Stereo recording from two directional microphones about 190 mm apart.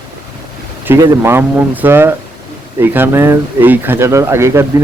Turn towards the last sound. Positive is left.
turn(degrees=-15)  # may be behind; listen again after turning